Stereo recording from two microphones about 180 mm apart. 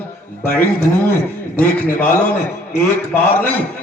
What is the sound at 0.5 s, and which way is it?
A man's voice, 10° left (ahead or behind).